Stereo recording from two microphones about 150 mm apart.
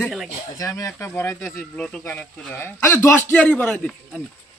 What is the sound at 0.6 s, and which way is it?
Speech, 20° left (ahead or behind).